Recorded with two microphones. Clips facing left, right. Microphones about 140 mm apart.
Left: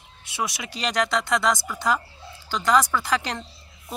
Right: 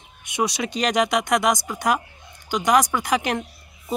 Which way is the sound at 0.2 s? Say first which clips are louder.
Right 6 dB; 20° right (ahead or behind).